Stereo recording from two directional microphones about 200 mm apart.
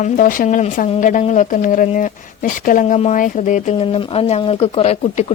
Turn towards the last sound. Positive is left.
turn(degrees=30)  # may be behind; listen again after turning